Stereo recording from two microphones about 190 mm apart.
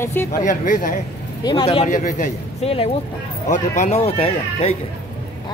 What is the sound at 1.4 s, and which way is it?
A woman's voice, 25° left (ahead or behind).